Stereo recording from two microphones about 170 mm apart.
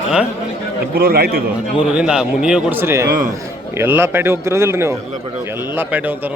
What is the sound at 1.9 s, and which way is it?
Speech, 5° right (ahead or behind).